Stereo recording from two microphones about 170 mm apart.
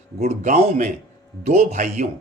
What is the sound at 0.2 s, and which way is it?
A man's voice, 40° right (ahead or behind).